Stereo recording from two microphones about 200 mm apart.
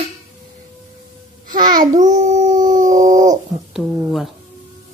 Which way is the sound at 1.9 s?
40° right (ahead or behind).